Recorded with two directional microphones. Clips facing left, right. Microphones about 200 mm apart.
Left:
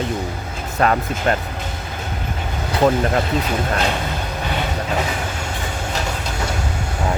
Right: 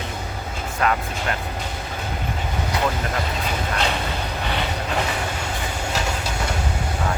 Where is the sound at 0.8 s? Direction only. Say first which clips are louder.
Left 4 dB; 35° left (ahead or behind).